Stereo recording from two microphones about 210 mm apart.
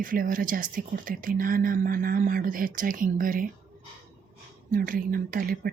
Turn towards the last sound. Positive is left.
turn(degrees=-45)  # may be behind; listen again after turning